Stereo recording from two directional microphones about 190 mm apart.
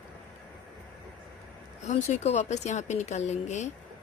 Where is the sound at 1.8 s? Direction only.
35° left (ahead or behind).